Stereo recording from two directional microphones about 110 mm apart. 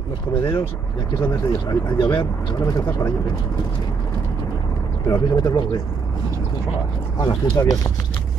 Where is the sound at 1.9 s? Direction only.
50° left (ahead or behind).